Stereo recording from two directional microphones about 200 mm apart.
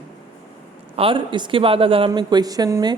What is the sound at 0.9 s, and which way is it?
Speech, 25° right (ahead or behind).